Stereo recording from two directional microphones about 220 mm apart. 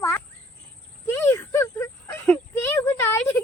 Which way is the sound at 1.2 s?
10° left (ahead or behind).